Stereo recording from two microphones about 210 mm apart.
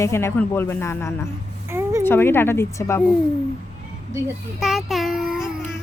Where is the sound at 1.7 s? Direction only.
10° right (ahead or behind).